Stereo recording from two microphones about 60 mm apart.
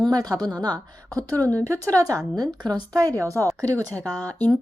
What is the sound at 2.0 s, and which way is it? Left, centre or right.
A woman's voice, right.